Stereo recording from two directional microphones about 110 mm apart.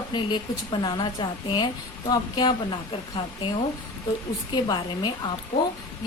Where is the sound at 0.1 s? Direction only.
45° left (ahead or behind).